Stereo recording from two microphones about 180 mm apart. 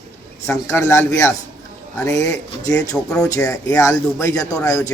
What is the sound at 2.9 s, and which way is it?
Speech, 5° left (ahead or behind).